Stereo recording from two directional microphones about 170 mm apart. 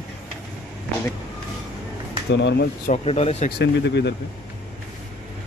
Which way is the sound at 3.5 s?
85° left.